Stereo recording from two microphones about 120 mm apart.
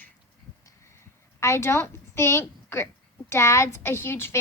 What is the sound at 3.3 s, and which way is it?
A woman's voice, 25° left (ahead or behind).